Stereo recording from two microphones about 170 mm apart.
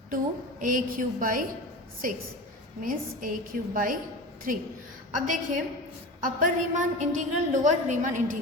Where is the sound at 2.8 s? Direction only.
55° right (ahead or behind).